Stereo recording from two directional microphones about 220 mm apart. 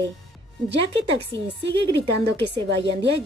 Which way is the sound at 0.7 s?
55° right (ahead or behind).